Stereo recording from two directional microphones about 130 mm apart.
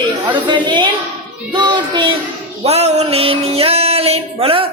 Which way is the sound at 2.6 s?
55° right (ahead or behind).